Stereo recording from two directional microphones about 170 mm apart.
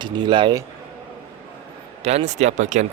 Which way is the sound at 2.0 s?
40° right (ahead or behind).